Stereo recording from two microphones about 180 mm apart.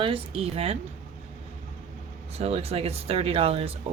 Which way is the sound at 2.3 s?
35° right (ahead or behind).